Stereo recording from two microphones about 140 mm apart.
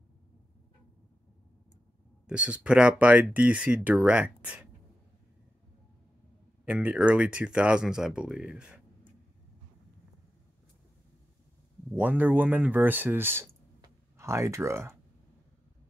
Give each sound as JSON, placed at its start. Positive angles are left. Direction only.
{"t": 2.2, "sound": "speech", "side_deg": -5}
{"t": 6.6, "sound": "speech", "side_deg": -10}
{"t": 12.0, "sound": "speech", "side_deg": -10}
{"t": 13.7, "sound": "a sound", "side_deg": -20}